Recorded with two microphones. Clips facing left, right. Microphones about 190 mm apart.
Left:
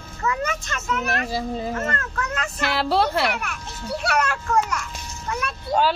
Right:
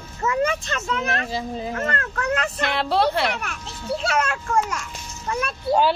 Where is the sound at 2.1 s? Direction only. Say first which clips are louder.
Right 4 dB; 40° right (ahead or behind).